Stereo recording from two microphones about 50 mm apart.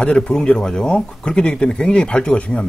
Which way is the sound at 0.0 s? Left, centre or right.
Centre.